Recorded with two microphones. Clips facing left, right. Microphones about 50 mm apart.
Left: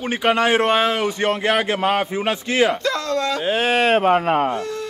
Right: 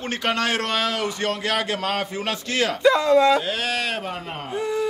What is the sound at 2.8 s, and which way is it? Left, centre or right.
Speech, centre.